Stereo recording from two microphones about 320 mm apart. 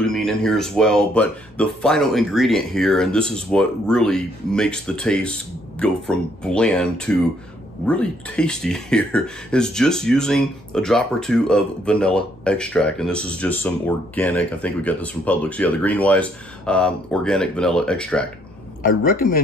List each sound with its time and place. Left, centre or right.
0.0 s speech: centre
18.8 s a man's voice: left